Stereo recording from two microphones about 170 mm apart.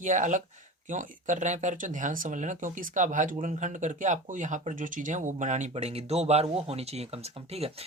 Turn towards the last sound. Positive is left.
turn(degrees=-35)  # may be behind; listen again after turning